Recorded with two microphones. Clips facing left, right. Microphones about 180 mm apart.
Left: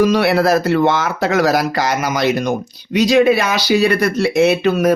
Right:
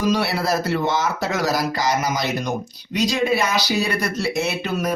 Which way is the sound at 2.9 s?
80° left.